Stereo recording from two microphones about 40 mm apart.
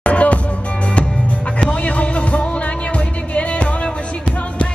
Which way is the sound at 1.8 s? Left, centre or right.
Left.